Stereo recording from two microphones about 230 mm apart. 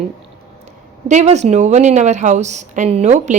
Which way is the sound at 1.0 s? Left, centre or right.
Right.